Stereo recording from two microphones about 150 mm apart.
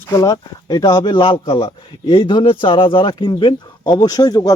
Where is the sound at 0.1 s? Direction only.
20° left (ahead or behind).